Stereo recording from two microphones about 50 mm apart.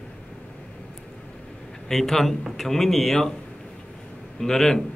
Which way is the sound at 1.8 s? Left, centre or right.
Centre.